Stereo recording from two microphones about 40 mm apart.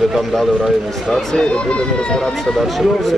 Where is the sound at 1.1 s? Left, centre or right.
Centre.